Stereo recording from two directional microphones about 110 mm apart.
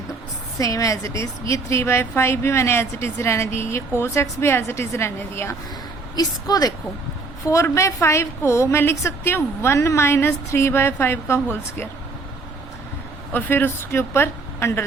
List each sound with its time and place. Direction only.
0.6 s a woman's voice: 30° left (ahead or behind)
6.1 s a woman's voice: 35° left (ahead or behind)
13.3 s a woman's voice: 20° left (ahead or behind)